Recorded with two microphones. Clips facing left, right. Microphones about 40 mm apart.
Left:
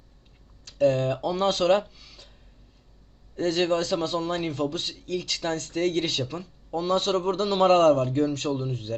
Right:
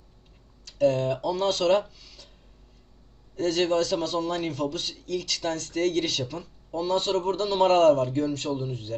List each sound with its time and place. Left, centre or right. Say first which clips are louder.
0.6 s a man's voice: left 1 dB; left
2.0 s a sound: left 1 dB; left
3.3 s a man's voice: even; left
6.9 s a man's voice: left 1 dB; left